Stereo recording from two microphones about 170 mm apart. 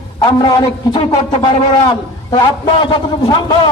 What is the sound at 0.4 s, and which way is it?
A man's voice, 20° left (ahead or behind).